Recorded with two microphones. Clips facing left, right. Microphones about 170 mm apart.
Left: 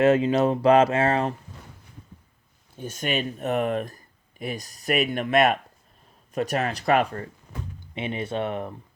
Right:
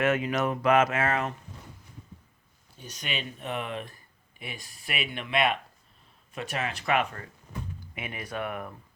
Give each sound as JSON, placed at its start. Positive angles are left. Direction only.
{"t": 0.0, "sound": "speech", "side_deg": 30}
{"t": 2.7, "sound": "speech", "side_deg": 50}